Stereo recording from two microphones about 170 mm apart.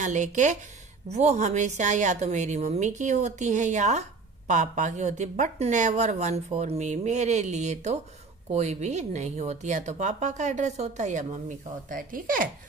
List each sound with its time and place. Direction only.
0.0 s a woman's voice: 45° right (ahead or behind)